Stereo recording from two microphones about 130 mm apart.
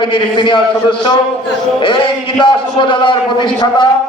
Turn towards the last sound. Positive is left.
turn(degrees=40)  # may be behind; listen again after turning